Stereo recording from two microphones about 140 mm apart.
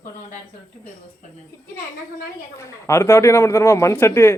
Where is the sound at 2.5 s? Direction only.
20° left (ahead or behind).